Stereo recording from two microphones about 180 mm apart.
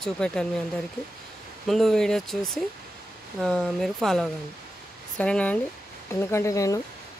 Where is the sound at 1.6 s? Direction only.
Centre (ahead or behind).